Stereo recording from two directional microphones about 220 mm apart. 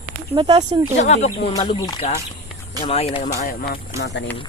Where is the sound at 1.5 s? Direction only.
20° left (ahead or behind).